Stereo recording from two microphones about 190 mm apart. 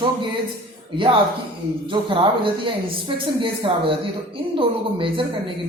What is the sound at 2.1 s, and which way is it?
Speech, 25° right (ahead or behind).